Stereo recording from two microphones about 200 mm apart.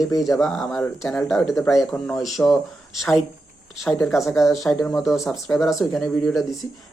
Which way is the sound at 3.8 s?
Centre (ahead or behind).